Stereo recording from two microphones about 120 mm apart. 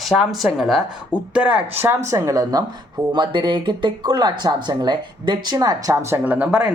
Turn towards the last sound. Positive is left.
turn(degrees=-10)  # may be behind; listen again after turning